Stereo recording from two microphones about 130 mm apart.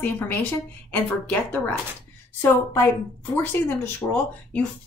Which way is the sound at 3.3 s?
15° left (ahead or behind).